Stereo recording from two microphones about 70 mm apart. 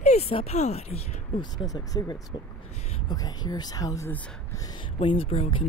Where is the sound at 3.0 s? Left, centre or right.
Left.